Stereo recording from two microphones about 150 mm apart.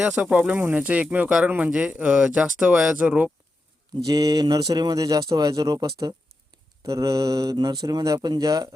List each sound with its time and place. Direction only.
0.0 s speech: 10° right (ahead or behind)
4.0 s speech: 25° right (ahead or behind)